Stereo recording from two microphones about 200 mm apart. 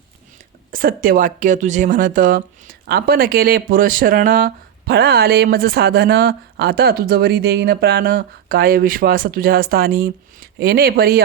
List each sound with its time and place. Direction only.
0.7 s speech: 45° right (ahead or behind)